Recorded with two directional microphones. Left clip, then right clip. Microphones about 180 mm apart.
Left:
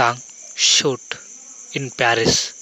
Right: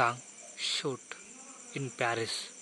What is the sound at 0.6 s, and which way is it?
Cricket, 40° left (ahead or behind).